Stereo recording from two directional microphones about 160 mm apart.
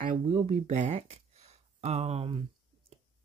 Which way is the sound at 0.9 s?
40° right (ahead or behind).